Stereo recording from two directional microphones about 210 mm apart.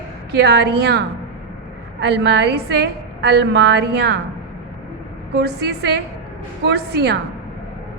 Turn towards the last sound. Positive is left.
turn(degrees=-50)  # may be behind; listen again after turning